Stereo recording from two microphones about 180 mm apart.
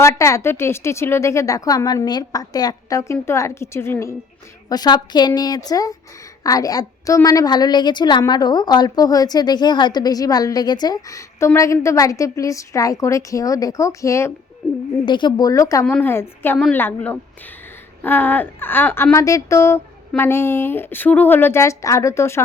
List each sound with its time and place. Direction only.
0.0 s a woman's voice: 15° left (ahead or behind)
15.0 s a woman's voice: 25° left (ahead or behind)